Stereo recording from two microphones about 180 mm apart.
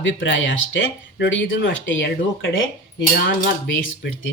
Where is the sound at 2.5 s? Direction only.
80° left.